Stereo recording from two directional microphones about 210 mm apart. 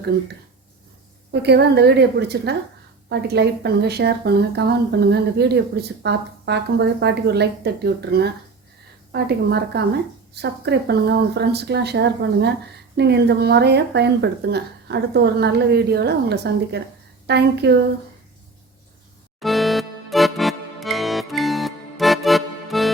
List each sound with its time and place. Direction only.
1.3 s speech: 50° right (ahead or behind)
19.4 s music: centre (ahead or behind)